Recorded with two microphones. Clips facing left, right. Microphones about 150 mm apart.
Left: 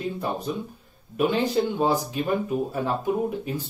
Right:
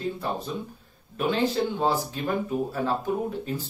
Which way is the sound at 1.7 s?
15° left (ahead or behind).